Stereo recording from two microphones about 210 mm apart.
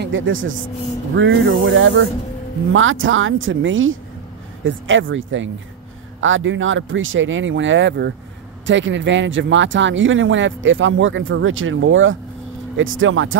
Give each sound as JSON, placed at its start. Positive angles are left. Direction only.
{"t": 0.0, "sound": "a woman's voice", "side_deg": -65}